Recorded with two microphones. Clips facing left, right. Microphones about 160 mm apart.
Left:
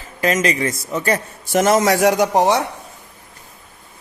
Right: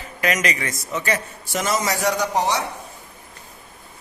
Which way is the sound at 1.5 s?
50° left (ahead or behind).